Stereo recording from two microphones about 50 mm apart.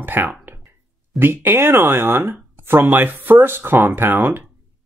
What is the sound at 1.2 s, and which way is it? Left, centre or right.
Speech, right.